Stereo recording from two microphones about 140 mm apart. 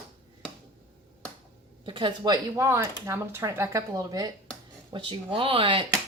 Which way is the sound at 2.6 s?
20° right (ahead or behind).